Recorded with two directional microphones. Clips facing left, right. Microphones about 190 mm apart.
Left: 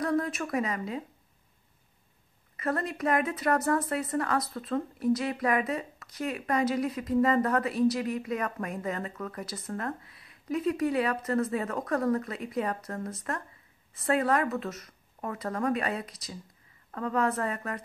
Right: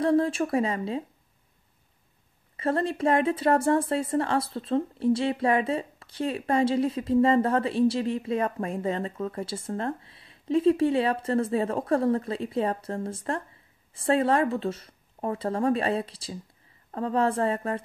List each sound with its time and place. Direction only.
0.0 s a woman's voice: 30° right (ahead or behind)
2.5 s a woman's voice: 30° right (ahead or behind)